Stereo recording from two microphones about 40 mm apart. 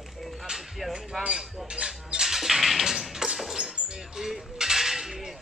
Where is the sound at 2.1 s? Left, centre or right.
Centre.